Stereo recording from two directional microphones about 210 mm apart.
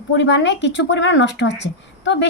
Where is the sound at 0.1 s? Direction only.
60° left (ahead or behind).